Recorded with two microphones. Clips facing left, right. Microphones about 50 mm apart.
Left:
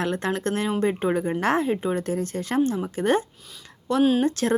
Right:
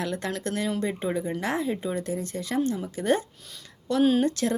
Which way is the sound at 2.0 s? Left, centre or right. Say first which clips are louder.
Left 4 dB; left.